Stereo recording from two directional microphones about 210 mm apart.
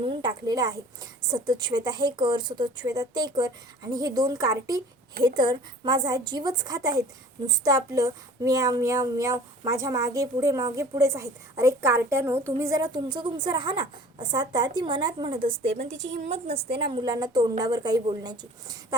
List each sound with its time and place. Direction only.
0.0 s a woman's voice: 20° right (ahead or behind)
16.0 s a woman's voice: 55° right (ahead or behind)
16.2 s a woman's voice: 30° right (ahead or behind)